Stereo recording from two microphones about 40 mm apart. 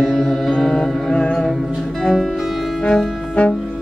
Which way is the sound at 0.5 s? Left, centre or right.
Centre.